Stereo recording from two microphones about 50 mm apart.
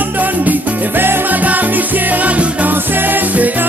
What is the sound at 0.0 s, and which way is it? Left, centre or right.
Music, right.